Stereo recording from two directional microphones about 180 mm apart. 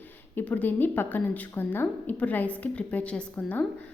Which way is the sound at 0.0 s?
10° left (ahead or behind).